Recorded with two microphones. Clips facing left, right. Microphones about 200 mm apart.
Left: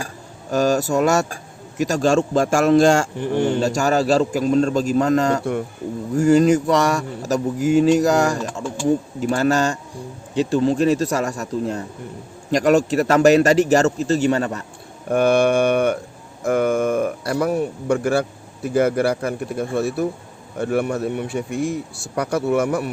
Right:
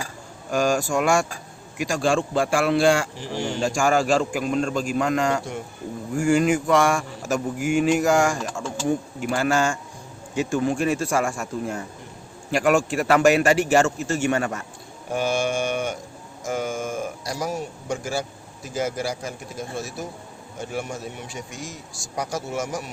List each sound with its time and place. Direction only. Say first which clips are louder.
0.5 s a man's voice: left 4 dB; 40° left (ahead or behind); by 3.6 s 55° left (ahead or behind)
3.6 s speech: left 2 dB; 40° left (ahead or behind)
15.1 s speech: left 8 dB; 60° left (ahead or behind)